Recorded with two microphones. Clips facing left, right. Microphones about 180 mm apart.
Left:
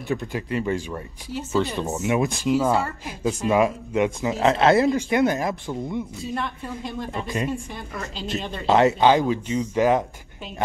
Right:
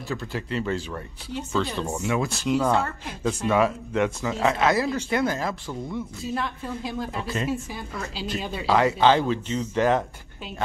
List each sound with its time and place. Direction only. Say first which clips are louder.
0.1 s speech: left 4 dB; 15° left (ahead or behind)
2.4 s speech: right 1 dB; 5° left (ahead or behind)
4.3 s speech: left 6 dB; 20° left (ahead or behind)
6.2 s a woman's voice: even; centre (ahead or behind)
8.6 s speech: left 3 dB; 25° left (ahead or behind)
9.1 s speech: left 2 dB; 10° left (ahead or behind)